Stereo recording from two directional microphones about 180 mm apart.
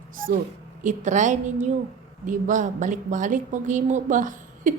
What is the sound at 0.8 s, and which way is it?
A woman's voice, 45° right (ahead or behind).